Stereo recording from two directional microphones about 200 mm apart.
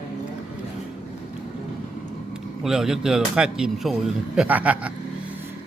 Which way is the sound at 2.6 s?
Centre (ahead or behind).